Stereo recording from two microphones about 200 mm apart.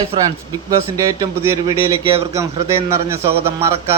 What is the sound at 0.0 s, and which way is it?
A man's voice, 20° right (ahead or behind).